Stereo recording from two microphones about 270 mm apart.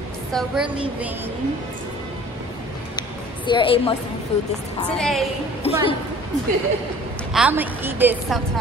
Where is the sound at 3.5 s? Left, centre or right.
Centre.